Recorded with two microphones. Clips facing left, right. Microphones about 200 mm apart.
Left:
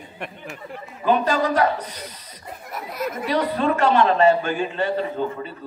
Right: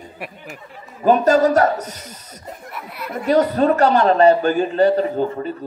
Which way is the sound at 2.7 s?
40° left (ahead or behind).